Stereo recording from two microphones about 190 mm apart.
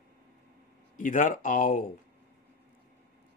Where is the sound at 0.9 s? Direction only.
45° left (ahead or behind).